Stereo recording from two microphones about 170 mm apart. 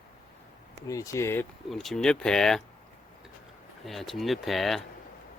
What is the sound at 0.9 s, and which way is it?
Speech, 20° left (ahead or behind).